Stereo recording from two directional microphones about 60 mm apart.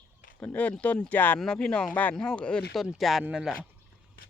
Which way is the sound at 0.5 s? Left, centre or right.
Left.